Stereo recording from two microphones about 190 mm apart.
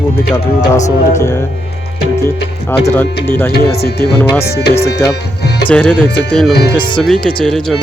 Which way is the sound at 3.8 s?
55° left (ahead or behind).